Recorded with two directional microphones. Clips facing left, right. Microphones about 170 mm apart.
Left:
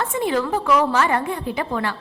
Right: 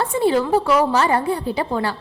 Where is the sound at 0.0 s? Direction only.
30° right (ahead or behind).